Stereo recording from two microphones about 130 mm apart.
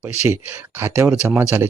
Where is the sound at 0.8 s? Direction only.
15° right (ahead or behind).